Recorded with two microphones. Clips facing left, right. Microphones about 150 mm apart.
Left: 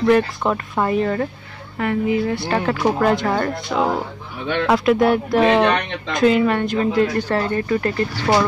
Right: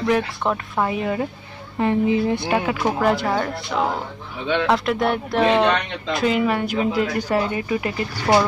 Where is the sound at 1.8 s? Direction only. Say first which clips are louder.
Right 1 dB; 20° right (ahead or behind).